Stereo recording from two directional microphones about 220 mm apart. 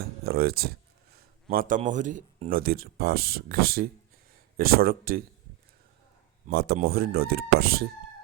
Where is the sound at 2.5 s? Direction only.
40° right (ahead or behind).